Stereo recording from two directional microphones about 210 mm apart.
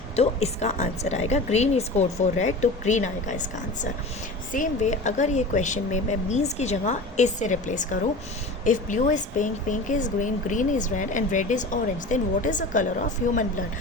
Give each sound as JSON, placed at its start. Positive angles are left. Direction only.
{"t": 0.2, "sound": "speech", "side_deg": 30}